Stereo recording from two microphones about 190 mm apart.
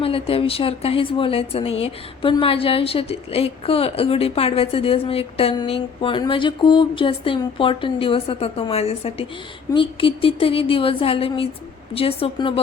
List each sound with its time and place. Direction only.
0.0 s a woman's voice: 30° left (ahead or behind)